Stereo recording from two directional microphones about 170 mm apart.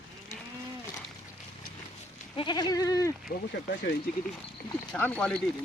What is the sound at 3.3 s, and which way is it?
Speech, 75° left (ahead or behind).